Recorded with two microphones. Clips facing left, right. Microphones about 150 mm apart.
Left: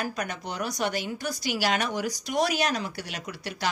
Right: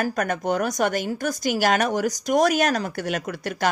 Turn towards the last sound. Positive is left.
turn(degrees=-50)  # may be behind; listen again after turning